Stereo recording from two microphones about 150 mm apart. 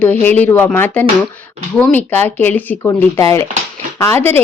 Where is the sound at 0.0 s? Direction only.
10° left (ahead or behind).